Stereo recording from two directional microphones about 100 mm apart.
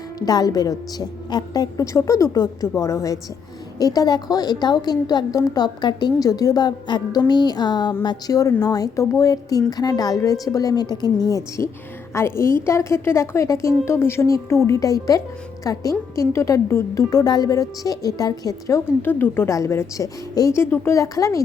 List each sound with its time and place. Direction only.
0.2 s a woman's voice: 40° left (ahead or behind)
19.0 s a woman's voice: 20° left (ahead or behind)
19.5 s a woman's voice: 30° left (ahead or behind)